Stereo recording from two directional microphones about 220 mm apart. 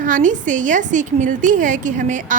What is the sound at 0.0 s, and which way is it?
A woman's voice, 35° right (ahead or behind).